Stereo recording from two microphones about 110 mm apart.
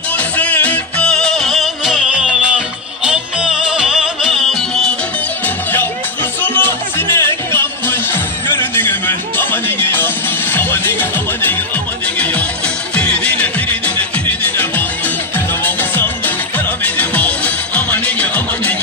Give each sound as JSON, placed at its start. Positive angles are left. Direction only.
{"t": 0.4, "sound": "music", "side_deg": 15}
{"t": 6.4, "sound": "music", "side_deg": 15}
{"t": 12.9, "sound": "music", "side_deg": 10}